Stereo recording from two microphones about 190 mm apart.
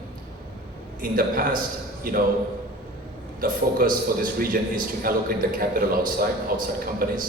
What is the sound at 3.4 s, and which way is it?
A man's voice, 50° right (ahead or behind).